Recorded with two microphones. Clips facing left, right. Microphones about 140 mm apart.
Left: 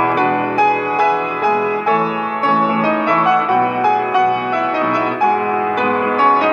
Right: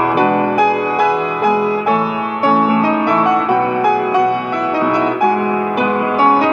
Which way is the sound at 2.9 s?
10° right (ahead or behind).